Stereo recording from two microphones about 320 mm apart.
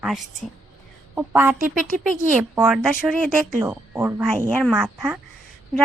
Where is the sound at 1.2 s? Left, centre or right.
Centre.